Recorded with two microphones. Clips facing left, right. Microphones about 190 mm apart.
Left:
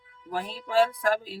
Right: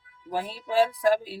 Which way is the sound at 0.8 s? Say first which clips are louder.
Right 3 dB; 15° right (ahead or behind).